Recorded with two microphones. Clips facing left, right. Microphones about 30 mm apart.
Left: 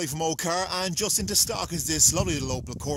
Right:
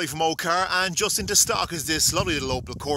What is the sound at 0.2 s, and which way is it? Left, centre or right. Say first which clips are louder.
Speech: right 5 dB; right.